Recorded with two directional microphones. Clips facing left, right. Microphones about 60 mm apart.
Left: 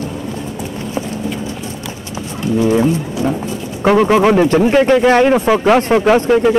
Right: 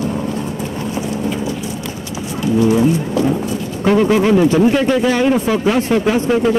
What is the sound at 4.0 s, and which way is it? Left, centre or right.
Speech, left.